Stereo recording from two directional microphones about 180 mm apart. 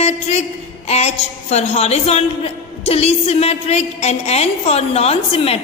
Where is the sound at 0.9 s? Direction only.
35° left (ahead or behind).